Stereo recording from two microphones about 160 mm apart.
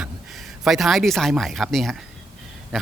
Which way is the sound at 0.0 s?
Centre (ahead or behind).